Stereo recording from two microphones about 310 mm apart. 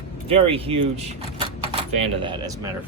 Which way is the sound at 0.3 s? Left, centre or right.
Centre.